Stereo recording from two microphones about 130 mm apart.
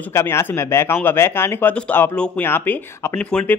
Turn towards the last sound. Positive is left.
turn(degrees=10)  # may be behind; listen again after turning